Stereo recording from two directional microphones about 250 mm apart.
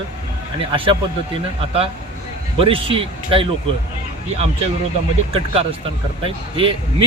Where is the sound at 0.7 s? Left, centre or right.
Right.